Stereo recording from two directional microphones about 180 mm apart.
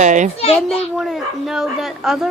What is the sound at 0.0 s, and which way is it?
Speech, 40° right (ahead or behind).